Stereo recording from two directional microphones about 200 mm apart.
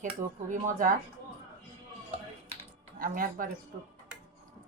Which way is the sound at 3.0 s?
45° right (ahead or behind).